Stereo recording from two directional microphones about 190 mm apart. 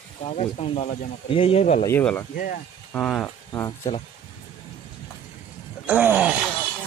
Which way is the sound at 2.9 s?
5° left (ahead or behind).